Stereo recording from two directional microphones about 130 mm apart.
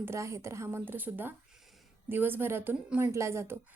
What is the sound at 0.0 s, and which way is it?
A woman's voice, 20° right (ahead or behind).